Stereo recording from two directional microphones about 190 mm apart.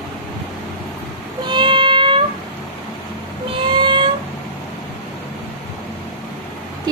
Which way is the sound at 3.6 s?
25° right (ahead or behind).